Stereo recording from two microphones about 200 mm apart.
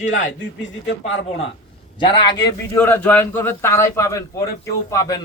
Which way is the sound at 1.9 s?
20° left (ahead or behind).